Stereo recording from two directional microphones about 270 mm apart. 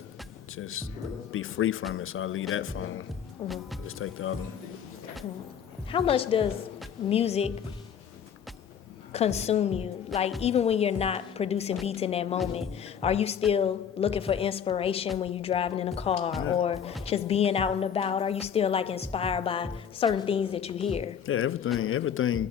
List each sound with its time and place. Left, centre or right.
0.5 s a man's voice: left
3.4 s speech: centre
3.8 s a man's voice: left
5.9 s a woman's voice: left
9.1 s a woman's voice: left
21.2 s a man's voice: left